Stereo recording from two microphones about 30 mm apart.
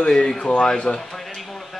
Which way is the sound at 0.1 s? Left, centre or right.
Left.